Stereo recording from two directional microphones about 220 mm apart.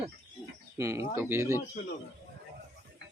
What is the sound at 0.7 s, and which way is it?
Speech, 15° right (ahead or behind).